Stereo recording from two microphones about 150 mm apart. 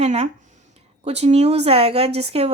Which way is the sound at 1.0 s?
45° right (ahead or behind).